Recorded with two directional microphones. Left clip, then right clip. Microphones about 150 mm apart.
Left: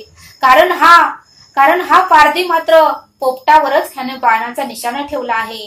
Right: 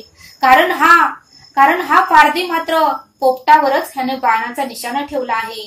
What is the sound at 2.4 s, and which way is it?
A woman's voice, 20° left (ahead or behind).